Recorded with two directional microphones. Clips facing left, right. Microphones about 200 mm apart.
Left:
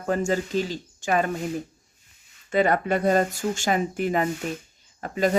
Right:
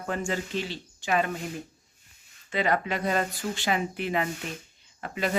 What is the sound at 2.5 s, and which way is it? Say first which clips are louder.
Speech: left 5 dB; 50° left (ahead or behind).